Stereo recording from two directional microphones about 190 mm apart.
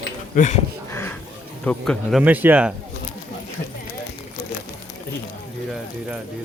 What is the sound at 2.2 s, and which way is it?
Speech, 10° right (ahead or behind).